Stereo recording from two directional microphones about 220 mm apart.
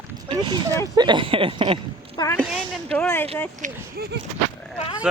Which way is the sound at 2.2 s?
10° left (ahead or behind).